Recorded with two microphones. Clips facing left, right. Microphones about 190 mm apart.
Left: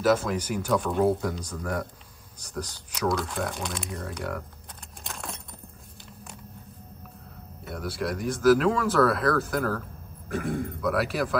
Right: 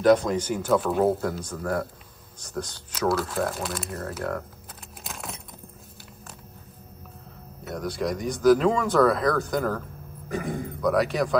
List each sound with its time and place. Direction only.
0.2 s speech: 5° left (ahead or behind)
3.1 s speech: 5° right (ahead or behind)
5.0 s keys jangling: centre (ahead or behind)
7.6 s speech: 5° left (ahead or behind)